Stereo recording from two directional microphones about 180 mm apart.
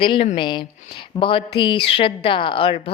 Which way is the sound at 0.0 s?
30° left (ahead or behind).